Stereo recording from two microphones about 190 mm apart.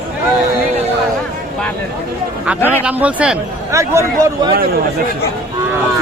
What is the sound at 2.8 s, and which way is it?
Speech, 5° right (ahead or behind).